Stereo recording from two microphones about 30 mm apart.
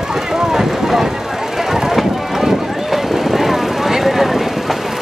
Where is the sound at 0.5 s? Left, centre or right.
Centre.